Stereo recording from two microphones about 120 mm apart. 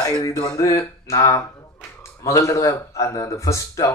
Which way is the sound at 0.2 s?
30° left (ahead or behind).